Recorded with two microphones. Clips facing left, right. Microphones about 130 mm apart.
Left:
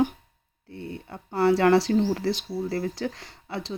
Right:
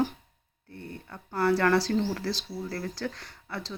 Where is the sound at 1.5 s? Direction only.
25° left (ahead or behind).